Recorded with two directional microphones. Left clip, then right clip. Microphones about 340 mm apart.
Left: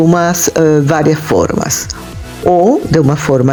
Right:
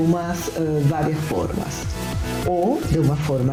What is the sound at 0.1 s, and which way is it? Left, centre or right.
Speech, left.